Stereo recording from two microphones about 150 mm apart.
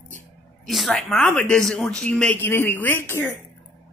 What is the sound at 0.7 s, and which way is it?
Speech, centre (ahead or behind).